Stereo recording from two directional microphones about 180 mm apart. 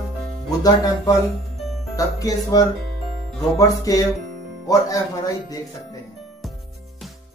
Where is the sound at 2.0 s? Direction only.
20° left (ahead or behind).